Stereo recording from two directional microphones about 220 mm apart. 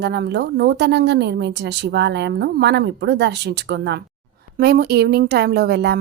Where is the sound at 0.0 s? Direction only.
50° right (ahead or behind).